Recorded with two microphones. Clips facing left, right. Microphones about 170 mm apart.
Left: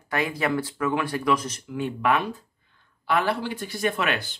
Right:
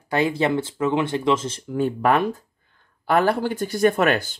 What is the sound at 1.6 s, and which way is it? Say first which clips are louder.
Speech: right 6 dB; 40° right (ahead or behind).